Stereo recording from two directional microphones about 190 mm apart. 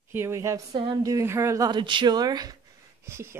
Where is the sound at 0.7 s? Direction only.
20° right (ahead or behind).